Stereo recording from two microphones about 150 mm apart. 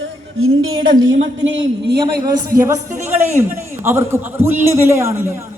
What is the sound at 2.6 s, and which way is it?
A man's voice, 20° right (ahead or behind).